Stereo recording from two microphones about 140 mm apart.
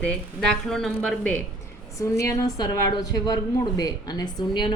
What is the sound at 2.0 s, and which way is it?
A woman's voice, 25° left (ahead or behind).